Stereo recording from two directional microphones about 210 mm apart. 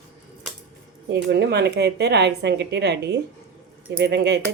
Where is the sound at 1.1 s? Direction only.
50° right (ahead or behind).